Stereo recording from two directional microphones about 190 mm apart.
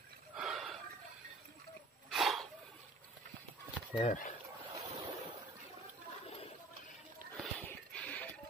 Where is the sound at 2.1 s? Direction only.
Centre (ahead or behind).